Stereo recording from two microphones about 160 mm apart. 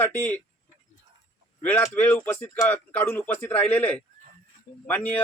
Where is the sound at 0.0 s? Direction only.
15° left (ahead or behind).